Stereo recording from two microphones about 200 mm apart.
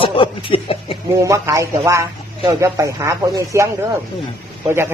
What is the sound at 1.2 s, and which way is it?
Speech, 15° right (ahead or behind).